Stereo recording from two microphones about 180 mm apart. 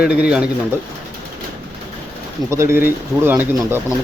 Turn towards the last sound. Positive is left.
turn(degrees=-10)  # may be behind; listen again after turning